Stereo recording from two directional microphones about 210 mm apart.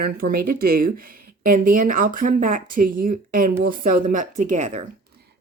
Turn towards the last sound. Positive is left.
turn(degrees=-35)  # may be behind; listen again after turning